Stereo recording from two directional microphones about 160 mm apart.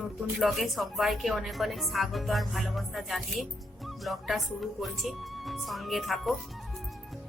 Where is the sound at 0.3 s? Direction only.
Centre (ahead or behind).